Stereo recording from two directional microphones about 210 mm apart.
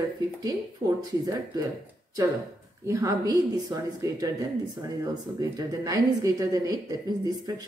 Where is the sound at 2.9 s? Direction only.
15° right (ahead or behind).